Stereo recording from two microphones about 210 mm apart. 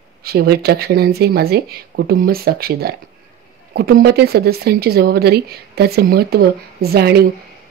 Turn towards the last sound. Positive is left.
turn(degrees=-50)  # may be behind; listen again after turning